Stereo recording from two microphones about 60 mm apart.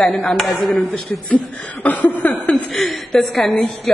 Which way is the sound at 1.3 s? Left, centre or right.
Left.